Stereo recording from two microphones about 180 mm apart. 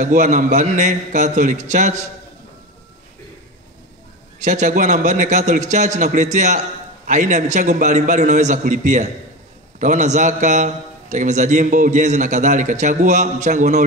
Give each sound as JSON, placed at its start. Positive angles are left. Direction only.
{"t": 0.0, "sound": "a man's voice", "side_deg": -45}
{"t": 4.4, "sound": "a man's voice", "side_deg": -40}